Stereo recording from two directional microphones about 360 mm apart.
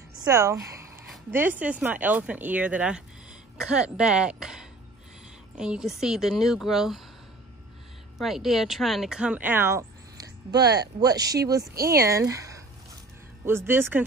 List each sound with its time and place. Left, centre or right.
0.2 s speech: centre
8.2 s speech: centre